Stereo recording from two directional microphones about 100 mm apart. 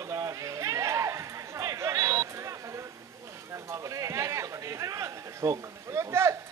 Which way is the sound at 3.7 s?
35° right (ahead or behind).